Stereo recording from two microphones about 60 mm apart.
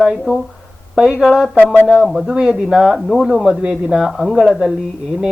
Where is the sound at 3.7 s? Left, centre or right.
Centre.